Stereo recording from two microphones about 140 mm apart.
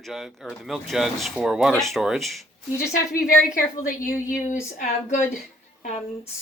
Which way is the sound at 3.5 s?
70° left (ahead or behind).